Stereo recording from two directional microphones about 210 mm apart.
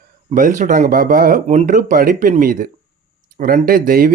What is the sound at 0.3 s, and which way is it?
Speech, 40° right (ahead or behind).